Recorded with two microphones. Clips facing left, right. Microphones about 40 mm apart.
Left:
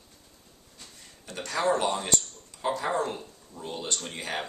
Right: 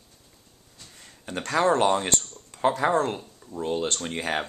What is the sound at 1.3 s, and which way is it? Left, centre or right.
Speech, right.